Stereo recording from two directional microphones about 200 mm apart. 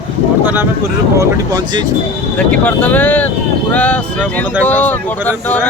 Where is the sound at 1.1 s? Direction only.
20° right (ahead or behind).